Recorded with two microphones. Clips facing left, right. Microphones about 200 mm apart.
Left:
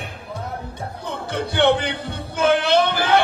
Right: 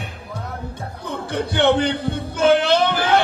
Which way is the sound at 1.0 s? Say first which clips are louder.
Right 2 dB; 50° right (ahead or behind).